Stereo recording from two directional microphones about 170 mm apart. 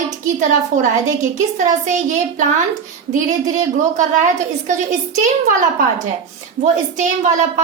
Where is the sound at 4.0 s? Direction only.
45° right (ahead or behind).